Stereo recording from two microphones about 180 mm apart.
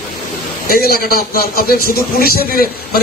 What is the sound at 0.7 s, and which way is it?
A man's voice, 55° left (ahead or behind).